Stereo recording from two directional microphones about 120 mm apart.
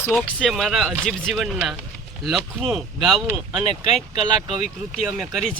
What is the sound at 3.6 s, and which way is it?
Speech, 60° left (ahead or behind).